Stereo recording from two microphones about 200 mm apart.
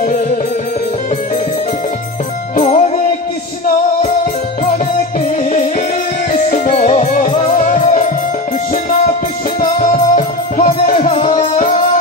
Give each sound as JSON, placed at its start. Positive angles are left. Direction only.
{"t": 2.5, "sound": "music", "side_deg": 35}
{"t": 6.3, "sound": "music", "side_deg": 40}
{"t": 9.6, "sound": "music", "side_deg": 40}
{"t": 11.0, "sound": "music", "side_deg": 30}